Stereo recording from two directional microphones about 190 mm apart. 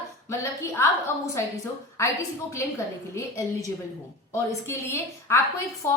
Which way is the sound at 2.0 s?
15° left (ahead or behind).